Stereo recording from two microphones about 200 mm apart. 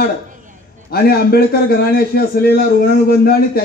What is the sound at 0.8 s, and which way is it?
A man's voice, 50° left (ahead or behind).